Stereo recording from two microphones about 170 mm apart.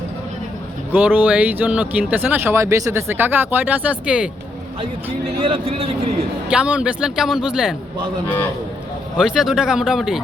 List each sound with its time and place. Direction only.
0.9 s speech: 10° right (ahead or behind)
5.4 s speech: 35° right (ahead or behind)
6.5 s speech: 5° right (ahead or behind)
9.1 s speech: 5° right (ahead or behind)